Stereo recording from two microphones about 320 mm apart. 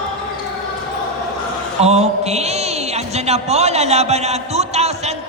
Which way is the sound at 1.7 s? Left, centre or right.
Centre.